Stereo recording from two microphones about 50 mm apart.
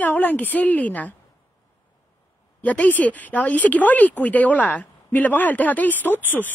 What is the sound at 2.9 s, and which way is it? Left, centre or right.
Speech, left.